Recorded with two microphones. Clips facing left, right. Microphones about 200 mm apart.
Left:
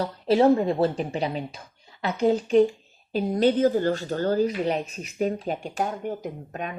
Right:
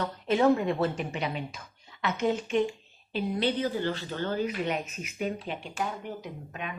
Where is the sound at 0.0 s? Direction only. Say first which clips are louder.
Left 5 dB; 30° left (ahead or behind).